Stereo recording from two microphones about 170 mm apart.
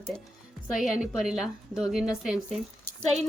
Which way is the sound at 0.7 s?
5° right (ahead or behind).